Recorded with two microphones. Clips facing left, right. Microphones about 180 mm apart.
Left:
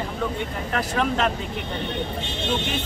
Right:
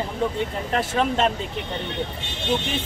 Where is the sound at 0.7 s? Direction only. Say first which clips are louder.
Right 2 dB; 25° right (ahead or behind).